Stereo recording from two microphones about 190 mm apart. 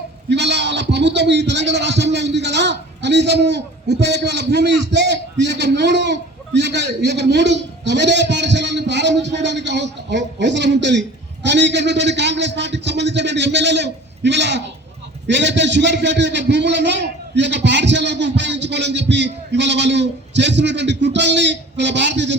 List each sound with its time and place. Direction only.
0.3 s a man's voice: 65° right (ahead or behind)